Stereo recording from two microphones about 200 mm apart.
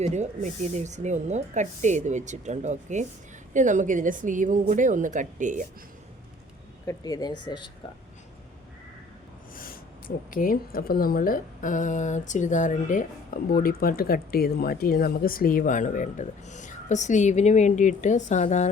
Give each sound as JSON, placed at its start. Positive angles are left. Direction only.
{"t": 0.0, "sound": "speech", "side_deg": -35}
{"t": 6.8, "sound": "speech", "side_deg": 20}
{"t": 10.3, "sound": "speech", "side_deg": 45}